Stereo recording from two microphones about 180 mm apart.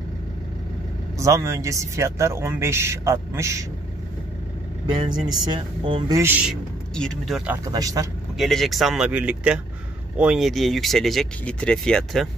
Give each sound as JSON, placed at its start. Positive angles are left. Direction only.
{"t": 1.1, "sound": "speech", "side_deg": -15}
{"t": 5.5, "sound": "speech", "side_deg": -25}
{"t": 6.5, "sound": "speech", "side_deg": 0}
{"t": 7.6, "sound": "speech", "side_deg": -20}
{"t": 8.4, "sound": "speech", "side_deg": 0}